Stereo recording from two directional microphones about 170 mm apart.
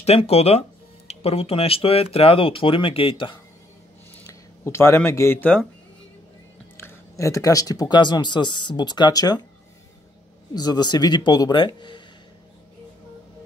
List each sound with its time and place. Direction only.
0.0 s speech: 35° left (ahead or behind)
4.3 s speech: 15° left (ahead or behind)
6.8 s speech: 15° left (ahead or behind)
10.5 s speech: 25° left (ahead or behind)